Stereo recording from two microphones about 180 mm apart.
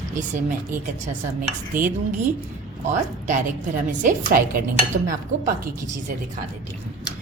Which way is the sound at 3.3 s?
45° right (ahead or behind).